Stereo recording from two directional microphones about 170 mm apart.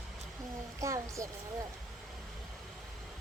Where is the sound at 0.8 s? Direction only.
20° right (ahead or behind).